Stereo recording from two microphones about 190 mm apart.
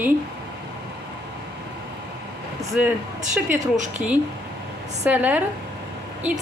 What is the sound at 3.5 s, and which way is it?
Speech, 40° right (ahead or behind).